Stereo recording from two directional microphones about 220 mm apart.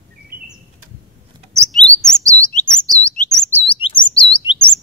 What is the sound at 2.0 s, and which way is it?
Chirp, 5° left (ahead or behind).